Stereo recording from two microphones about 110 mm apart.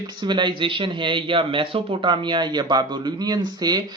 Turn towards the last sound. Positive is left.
turn(degrees=-40)  # may be behind; listen again after turning